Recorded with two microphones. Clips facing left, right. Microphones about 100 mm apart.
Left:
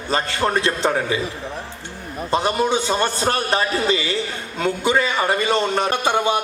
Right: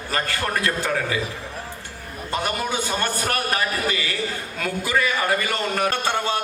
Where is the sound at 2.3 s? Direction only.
25° left (ahead or behind).